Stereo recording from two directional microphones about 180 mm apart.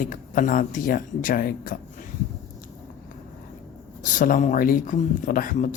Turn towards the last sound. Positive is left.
turn(degrees=45)  # may be behind; listen again after turning